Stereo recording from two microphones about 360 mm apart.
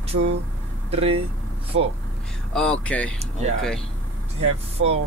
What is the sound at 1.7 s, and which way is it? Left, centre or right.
Speech, right.